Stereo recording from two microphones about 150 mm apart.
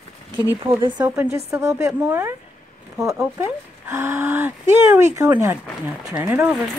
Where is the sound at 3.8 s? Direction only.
15° right (ahead or behind).